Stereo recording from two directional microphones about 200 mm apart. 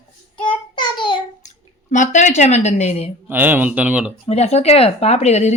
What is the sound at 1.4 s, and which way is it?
Speech, 40° left (ahead or behind).